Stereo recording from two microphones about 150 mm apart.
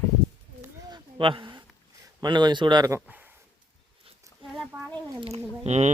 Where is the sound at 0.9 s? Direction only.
30° right (ahead or behind).